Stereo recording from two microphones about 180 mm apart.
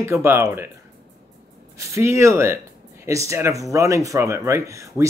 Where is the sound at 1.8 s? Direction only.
15° right (ahead or behind).